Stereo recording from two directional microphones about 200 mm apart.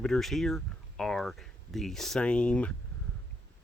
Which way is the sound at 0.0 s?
Centre (ahead or behind).